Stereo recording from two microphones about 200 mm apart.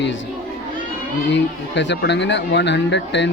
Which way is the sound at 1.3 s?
60° left (ahead or behind).